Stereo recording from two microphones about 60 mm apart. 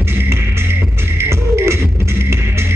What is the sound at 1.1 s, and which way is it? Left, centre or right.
Music, right.